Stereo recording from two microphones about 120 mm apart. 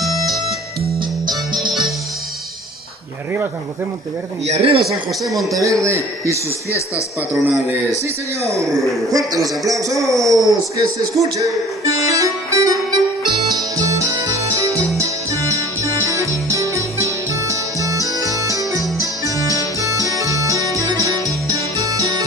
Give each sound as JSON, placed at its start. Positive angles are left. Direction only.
{"t": 0.1, "sound": "music", "side_deg": 0}
{"t": 4.5, "sound": "speech", "side_deg": -55}
{"t": 5.6, "sound": "a man's voice", "side_deg": -25}
{"t": 9.1, "sound": "a man's voice", "side_deg": -30}
{"t": 11.3, "sound": "music", "side_deg": -30}
{"t": 18.2, "sound": "organ", "side_deg": -30}
{"t": 18.9, "sound": "music", "side_deg": -25}
{"t": 19.4, "sound": "music", "side_deg": 30}
{"t": 19.8, "sound": "music", "side_deg": -25}